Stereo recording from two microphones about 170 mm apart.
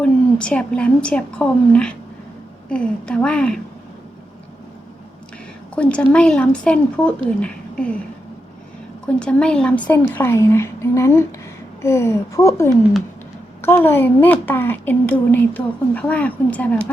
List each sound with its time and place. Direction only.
0.0 s a woman's voice: 5° left (ahead or behind)
5.7 s a woman's voice: 5° left (ahead or behind)
9.0 s a woman's voice: 5° left (ahead or behind)